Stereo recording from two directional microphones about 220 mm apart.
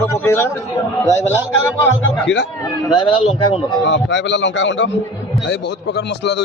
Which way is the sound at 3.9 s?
55° left (ahead or behind).